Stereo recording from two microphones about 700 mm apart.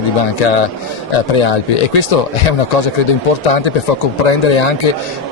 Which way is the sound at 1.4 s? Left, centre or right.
Left.